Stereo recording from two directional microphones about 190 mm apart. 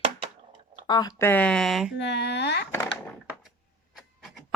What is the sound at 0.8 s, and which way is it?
Speech, 20° left (ahead or behind).